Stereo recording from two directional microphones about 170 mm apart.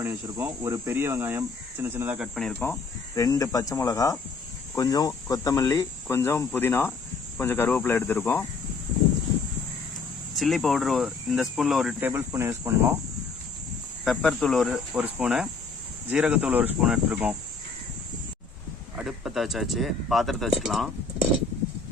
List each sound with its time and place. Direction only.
0.0 s speech: 15° right (ahead or behind); by 2.7 s 10° left (ahead or behind)
3.2 s speech: 20° left (ahead or behind)
10.3 s speech: centre (ahead or behind); by 13.0 s 15° right (ahead or behind)
14.0 s speech: centre (ahead or behind)
18.9 s speech: centre (ahead or behind)